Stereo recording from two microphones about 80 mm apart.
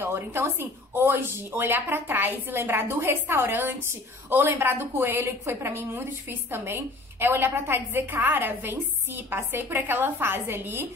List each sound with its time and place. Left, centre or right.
0.0 s a woman's voice: right